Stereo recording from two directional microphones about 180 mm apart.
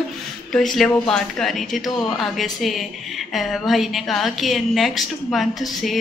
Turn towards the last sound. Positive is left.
turn(degrees=0)  # may be behind; listen again after turning